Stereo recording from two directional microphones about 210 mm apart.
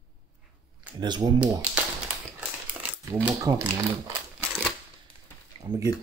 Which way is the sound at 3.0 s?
15° right (ahead or behind).